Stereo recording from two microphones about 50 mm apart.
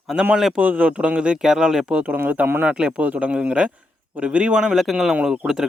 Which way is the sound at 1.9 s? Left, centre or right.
Right.